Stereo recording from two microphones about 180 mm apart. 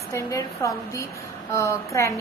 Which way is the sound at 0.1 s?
15° left (ahead or behind).